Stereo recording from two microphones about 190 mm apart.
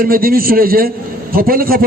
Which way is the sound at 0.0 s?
50° right (ahead or behind).